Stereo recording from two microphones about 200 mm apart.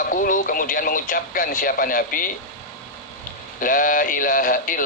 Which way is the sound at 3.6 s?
45° left (ahead or behind).